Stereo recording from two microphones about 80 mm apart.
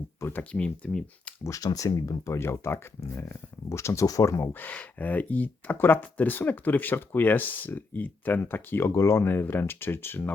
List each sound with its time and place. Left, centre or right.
0.2 s speech: left
0.5 s speech: centre
1.5 s speech: left
4.5 s speech: centre